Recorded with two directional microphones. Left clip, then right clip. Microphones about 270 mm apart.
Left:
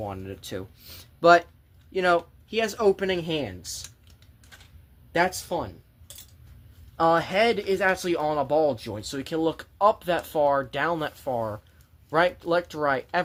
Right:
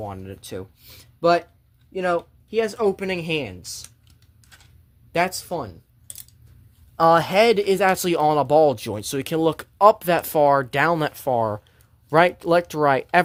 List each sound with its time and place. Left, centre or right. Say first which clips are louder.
0.0 s speech: right 1 dB; centre
5.1 s speech: right 2 dB; right
6.9 s speech: right 6 dB; right